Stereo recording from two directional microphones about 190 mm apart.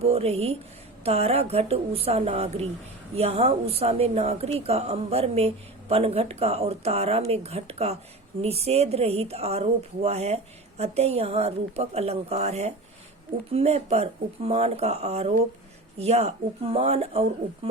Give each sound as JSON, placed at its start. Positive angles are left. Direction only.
{"t": 0.0, "sound": "a woman's voice", "side_deg": -30}